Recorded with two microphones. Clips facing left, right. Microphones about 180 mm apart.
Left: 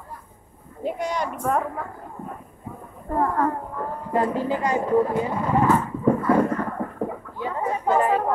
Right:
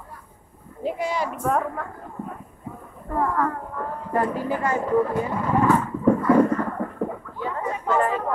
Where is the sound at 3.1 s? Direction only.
35° left (ahead or behind).